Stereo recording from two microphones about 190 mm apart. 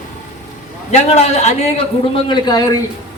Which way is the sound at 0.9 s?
35° left (ahead or behind).